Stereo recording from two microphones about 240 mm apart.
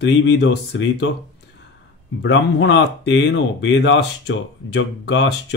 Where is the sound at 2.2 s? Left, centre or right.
Left.